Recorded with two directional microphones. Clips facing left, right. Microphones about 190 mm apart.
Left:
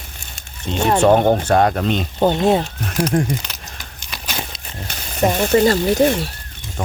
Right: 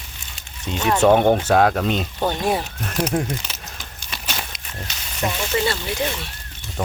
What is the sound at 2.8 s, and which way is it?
Speech, centre (ahead or behind).